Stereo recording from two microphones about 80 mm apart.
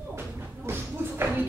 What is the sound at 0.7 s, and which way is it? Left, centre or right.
Shuffle, right.